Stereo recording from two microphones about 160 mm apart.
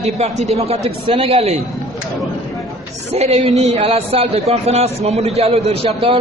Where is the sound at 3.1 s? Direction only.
40° right (ahead or behind).